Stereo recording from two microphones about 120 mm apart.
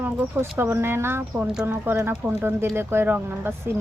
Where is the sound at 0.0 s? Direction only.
20° right (ahead or behind).